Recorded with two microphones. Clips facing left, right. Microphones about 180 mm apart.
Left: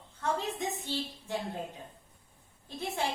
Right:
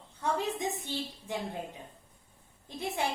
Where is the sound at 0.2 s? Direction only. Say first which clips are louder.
Right 1 dB; 15° right (ahead or behind).